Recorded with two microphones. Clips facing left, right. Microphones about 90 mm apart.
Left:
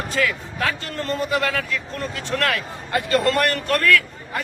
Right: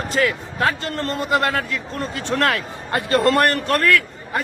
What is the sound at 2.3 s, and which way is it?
Speech, 25° right (ahead or behind).